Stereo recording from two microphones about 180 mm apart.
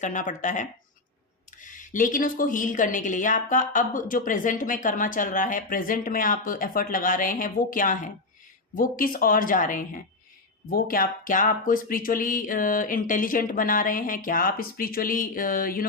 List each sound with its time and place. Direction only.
0.0 s speech: 45° left (ahead or behind)